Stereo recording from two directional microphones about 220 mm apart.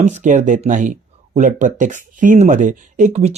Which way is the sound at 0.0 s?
35° right (ahead or behind).